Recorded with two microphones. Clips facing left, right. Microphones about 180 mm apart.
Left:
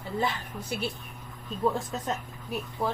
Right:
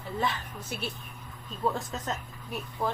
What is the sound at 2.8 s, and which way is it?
Speech, 5° left (ahead or behind).